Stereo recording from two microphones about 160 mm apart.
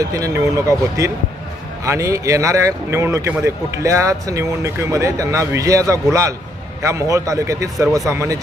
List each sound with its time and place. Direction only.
0.0 s speech: 20° right (ahead or behind)